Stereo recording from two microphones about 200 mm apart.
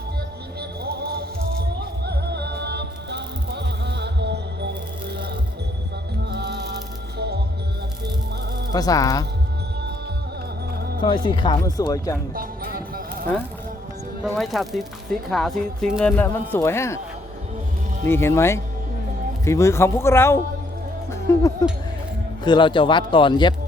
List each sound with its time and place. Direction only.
0.6 s music: 55° right (ahead or behind)
6.3 s music: 55° right (ahead or behind)
8.7 s speech: 20° left (ahead or behind)
11.0 s speech: 25° left (ahead or behind)
12.3 s music: 45° right (ahead or behind)
14.3 s speech: centre (ahead or behind)
16.1 s speech: 10° left (ahead or behind)
18.1 s speech: 10° left (ahead or behind)